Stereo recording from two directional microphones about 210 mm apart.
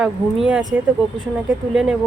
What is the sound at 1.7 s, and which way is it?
Speech, 5° right (ahead or behind).